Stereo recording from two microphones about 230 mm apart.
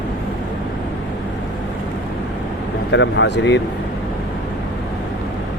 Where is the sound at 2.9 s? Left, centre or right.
Left.